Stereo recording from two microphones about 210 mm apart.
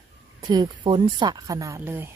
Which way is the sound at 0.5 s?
20° right (ahead or behind).